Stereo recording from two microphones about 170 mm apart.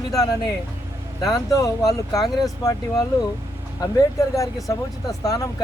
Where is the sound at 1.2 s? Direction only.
20° left (ahead or behind).